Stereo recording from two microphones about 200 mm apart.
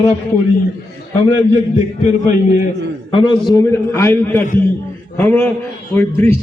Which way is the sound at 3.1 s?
25° left (ahead or behind).